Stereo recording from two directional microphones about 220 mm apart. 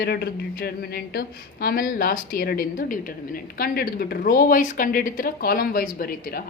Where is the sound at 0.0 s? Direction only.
45° left (ahead or behind).